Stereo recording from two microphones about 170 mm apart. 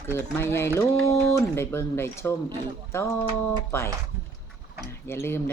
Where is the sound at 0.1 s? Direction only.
15° left (ahead or behind).